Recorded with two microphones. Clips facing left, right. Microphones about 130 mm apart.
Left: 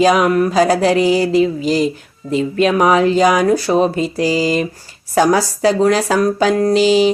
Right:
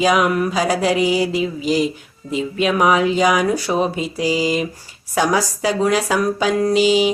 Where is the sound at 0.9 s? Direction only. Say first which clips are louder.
Left 4 dB; 10° right (ahead or behind).